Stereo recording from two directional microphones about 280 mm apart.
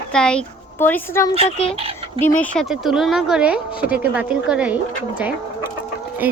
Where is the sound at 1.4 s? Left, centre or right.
Left.